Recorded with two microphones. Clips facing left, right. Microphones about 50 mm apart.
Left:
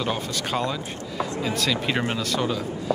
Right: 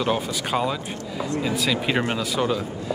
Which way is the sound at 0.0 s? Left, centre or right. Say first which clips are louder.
Right 3 dB; centre.